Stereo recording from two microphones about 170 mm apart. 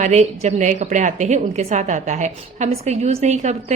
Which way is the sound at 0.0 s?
45° right (ahead or behind).